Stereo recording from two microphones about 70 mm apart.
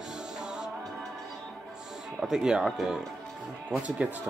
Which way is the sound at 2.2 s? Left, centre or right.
Centre.